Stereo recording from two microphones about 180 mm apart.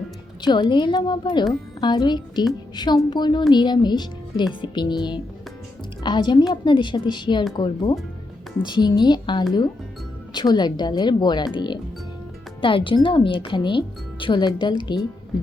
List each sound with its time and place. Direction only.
0.4 s speech: 25° left (ahead or behind)